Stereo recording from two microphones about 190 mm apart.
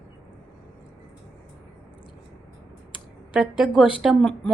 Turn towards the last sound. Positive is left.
turn(degrees=0)  # may be behind; listen again after turning